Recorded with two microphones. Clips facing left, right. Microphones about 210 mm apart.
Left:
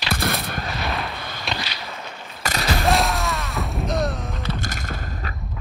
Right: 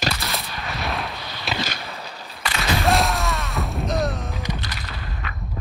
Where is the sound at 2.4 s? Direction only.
45° left (ahead or behind).